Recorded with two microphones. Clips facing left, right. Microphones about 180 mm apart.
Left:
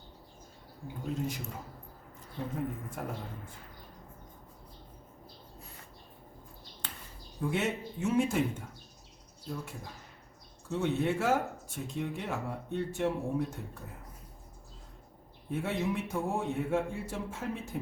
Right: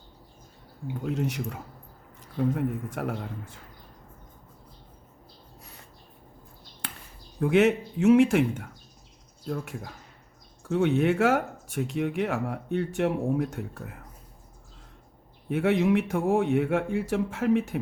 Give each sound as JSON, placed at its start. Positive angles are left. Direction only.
{"t": 1.0, "sound": "a man's voice", "side_deg": -75}
{"t": 2.6, "sound": "a man's voice", "side_deg": -70}
{"t": 7.3, "sound": "a man's voice", "side_deg": -75}
{"t": 15.4, "sound": "speech", "side_deg": -85}